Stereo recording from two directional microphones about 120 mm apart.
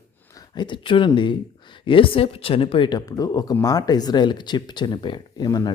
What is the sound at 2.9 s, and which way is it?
Speech, 30° left (ahead or behind).